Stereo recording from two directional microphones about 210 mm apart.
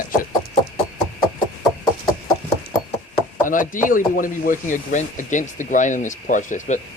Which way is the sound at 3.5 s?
40° left (ahead or behind).